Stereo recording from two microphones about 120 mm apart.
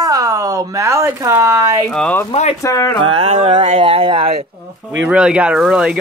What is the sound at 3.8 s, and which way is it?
Speech, 50° right (ahead or behind).